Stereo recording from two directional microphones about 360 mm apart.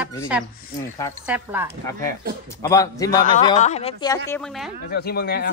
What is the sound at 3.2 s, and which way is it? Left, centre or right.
Speech, left.